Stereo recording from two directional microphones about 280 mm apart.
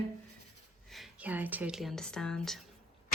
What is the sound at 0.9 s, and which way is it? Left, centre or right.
Speech, centre.